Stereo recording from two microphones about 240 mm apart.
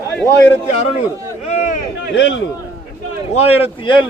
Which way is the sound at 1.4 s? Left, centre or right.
Left.